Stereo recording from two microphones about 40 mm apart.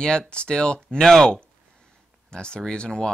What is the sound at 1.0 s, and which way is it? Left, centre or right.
Speech, centre.